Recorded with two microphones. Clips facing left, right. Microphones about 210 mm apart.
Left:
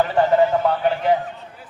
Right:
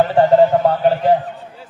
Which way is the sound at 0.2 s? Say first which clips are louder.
Right 5 dB; 35° right (ahead or behind).